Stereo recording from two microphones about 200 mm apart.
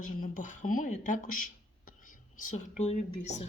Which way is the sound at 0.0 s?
40° left (ahead or behind).